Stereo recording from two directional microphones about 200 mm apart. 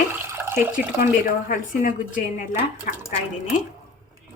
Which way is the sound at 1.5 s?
40° left (ahead or behind).